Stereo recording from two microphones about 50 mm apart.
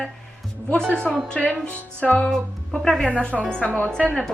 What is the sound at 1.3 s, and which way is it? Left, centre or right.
Speech, left.